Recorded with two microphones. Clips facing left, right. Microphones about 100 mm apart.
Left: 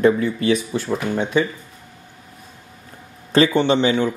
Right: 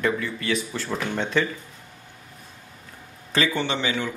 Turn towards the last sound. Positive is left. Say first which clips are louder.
# left 9 dB
turn(degrees=25)  # may be behind; listen again after turning